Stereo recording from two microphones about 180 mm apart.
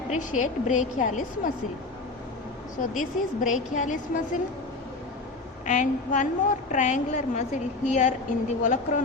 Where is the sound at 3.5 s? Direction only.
45° left (ahead or behind).